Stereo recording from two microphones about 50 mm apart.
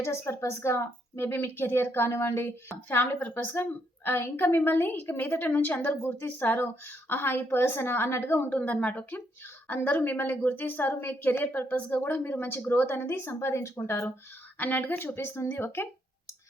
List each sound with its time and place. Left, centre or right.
0.0 s a woman's voice: left
1.2 s a woman's voice: left
3.6 s a woman's voice: left
8.4 s a woman's voice: left
13.7 s speech: left
14.6 s a woman's voice: left
15.4 s a woman's voice: left